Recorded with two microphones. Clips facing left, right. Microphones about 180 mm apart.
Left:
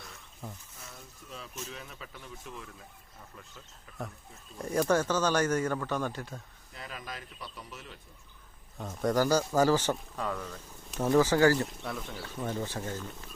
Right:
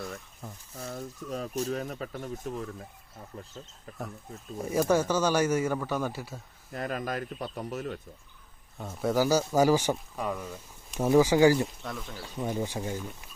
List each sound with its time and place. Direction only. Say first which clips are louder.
0.9 s speech: right 12 dB; 45° right (ahead or behind)
3.3 s speech: right 11 dB; 30° right (ahead or behind)
4.5 s speech: right 2 dB; 5° right (ahead or behind)
6.7 s speech: right 11 dB; 50° right (ahead or behind)
8.8 s speech: right 1 dB; 5° right (ahead or behind)
11.8 s speech: even; centre (ahead or behind)
12.2 s speech: right 4 dB; 15° right (ahead or behind)